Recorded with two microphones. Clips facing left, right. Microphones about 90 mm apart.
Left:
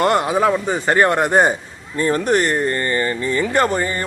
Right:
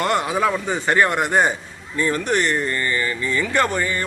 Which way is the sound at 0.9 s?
35° left (ahead or behind).